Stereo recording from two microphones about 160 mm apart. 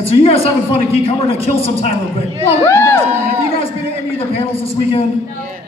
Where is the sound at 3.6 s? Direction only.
40° left (ahead or behind).